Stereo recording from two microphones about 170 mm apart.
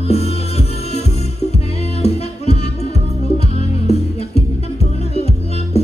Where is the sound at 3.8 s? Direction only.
40° left (ahead or behind).